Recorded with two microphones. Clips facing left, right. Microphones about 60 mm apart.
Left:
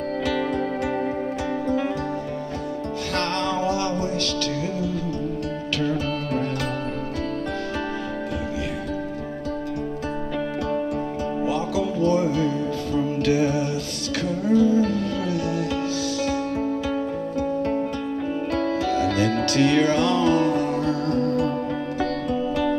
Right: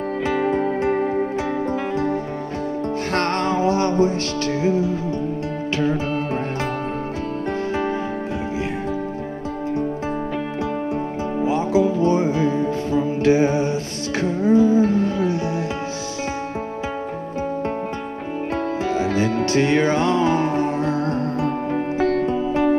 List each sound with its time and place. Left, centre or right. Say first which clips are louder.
0.3 s music: right 6 dB; right
3.2 s music: right 3 dB; right
11.4 s music: right 7 dB; right
18.9 s music: right 3 dB; right